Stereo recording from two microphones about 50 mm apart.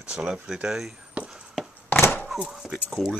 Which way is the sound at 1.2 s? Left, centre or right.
Right.